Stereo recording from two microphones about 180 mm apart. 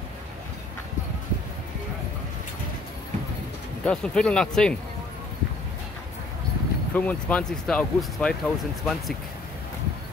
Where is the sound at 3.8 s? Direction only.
5° left (ahead or behind).